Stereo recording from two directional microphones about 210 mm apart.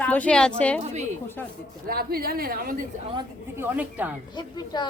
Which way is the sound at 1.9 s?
45° right (ahead or behind).